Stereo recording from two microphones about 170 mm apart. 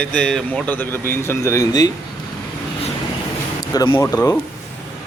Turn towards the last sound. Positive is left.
turn(degrees=15)  # may be behind; listen again after turning